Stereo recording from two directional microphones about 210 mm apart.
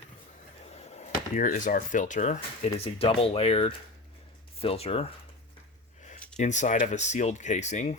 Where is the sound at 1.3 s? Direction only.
40° left (ahead or behind).